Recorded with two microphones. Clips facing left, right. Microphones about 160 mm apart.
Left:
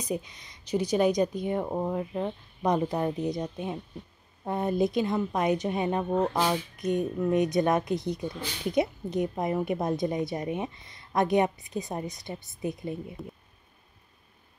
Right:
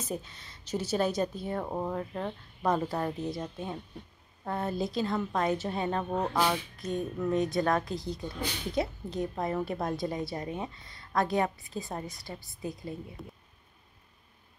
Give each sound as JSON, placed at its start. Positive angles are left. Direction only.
{"t": 0.0, "sound": "speech", "side_deg": 15}
{"t": 6.8, "sound": "a woman's voice", "side_deg": 20}